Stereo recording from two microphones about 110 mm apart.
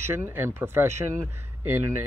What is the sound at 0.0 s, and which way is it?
Speech, 20° right (ahead or behind).